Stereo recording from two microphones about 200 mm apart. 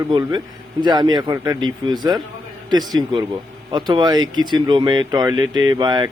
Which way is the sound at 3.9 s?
20° right (ahead or behind).